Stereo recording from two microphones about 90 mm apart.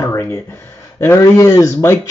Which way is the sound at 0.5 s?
30° left (ahead or behind).